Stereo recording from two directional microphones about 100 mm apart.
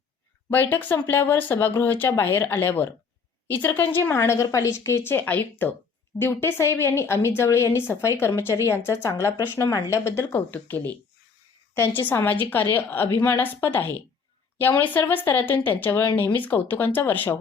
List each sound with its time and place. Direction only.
0.5 s a woman's voice: 20° left (ahead or behind)
10.5 s speech: 15° left (ahead or behind)
12.0 s a woman's voice: 20° left (ahead or behind)